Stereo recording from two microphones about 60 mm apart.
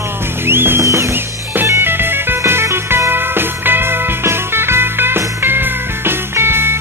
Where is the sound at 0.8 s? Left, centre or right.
Right.